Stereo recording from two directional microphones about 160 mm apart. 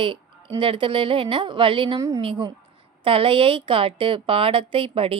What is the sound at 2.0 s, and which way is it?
A woman's voice, 20° right (ahead or behind).